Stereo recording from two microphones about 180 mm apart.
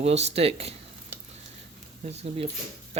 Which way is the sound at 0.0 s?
35° right (ahead or behind).